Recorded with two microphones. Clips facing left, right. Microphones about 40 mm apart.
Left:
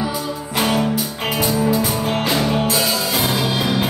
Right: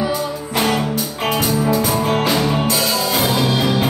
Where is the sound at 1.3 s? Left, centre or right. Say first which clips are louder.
Even; centre.